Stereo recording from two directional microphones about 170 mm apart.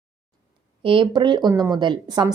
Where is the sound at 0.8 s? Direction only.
30° right (ahead or behind).